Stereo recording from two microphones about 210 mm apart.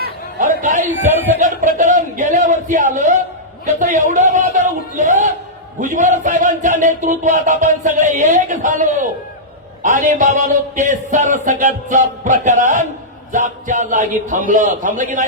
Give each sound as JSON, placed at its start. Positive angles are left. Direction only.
{"t": 0.0, "sound": "chatter", "side_deg": -40}
{"t": 1.4, "sound": "a sound", "side_deg": -35}
{"t": 3.8, "sound": "speech", "side_deg": -35}